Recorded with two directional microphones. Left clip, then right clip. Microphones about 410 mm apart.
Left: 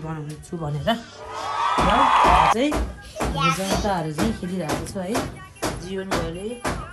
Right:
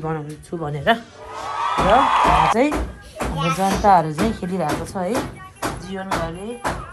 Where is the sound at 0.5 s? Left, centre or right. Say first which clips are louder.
Right 4 dB; centre.